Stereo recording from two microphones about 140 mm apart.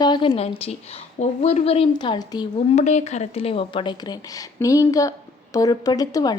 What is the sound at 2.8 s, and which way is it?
A woman's voice, 55° left (ahead or behind).